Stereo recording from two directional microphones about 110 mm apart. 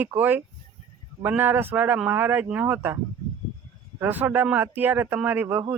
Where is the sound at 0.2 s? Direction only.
15° right (ahead or behind).